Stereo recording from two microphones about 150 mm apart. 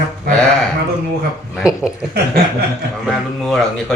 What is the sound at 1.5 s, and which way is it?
Speech, 5° right (ahead or behind).